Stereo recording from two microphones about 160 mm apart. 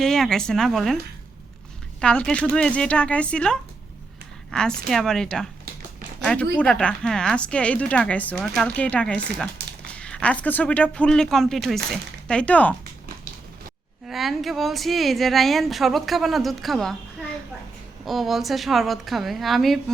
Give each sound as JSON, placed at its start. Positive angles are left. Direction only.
{"t": 0.0, "sound": "speech", "side_deg": 5}
{"t": 2.0, "sound": "speech", "side_deg": 5}
{"t": 14.1, "sound": "speech", "side_deg": 0}
{"t": 18.0, "sound": "speech", "side_deg": 0}